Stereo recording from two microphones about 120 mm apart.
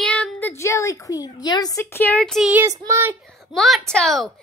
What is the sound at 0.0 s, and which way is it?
A woman's voice, 10° left (ahead or behind).